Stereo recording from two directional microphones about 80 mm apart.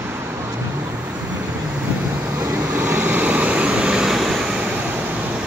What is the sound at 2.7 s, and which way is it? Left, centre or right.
Vehicle, right.